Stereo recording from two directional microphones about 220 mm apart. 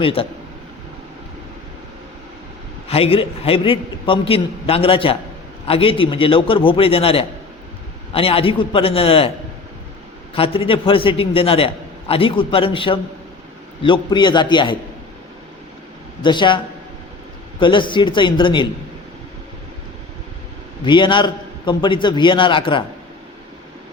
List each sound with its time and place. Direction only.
0.0 s a man's voice: 25° left (ahead or behind)
2.9 s a man's voice: 25° left (ahead or behind)
10.3 s a man's voice: 25° left (ahead or behind)
16.2 s a man's voice: 20° left (ahead or behind)
17.6 s a man's voice: 20° left (ahead or behind)
20.8 s a man's voice: 20° left (ahead or behind)